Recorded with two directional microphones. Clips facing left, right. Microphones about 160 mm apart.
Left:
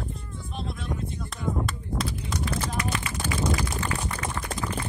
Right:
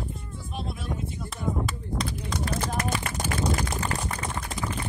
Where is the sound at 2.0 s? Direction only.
45° right (ahead or behind).